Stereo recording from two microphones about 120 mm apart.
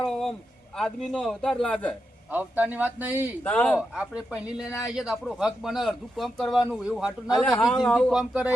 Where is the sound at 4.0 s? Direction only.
10° right (ahead or behind).